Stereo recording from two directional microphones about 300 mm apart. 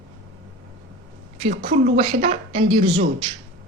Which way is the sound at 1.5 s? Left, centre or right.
Right.